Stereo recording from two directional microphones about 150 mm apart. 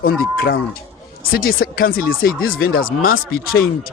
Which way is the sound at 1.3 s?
80° left.